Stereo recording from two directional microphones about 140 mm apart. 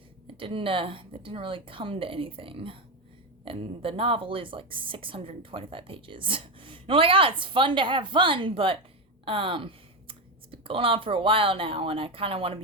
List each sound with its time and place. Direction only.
0.3 s speech: 40° right (ahead or behind)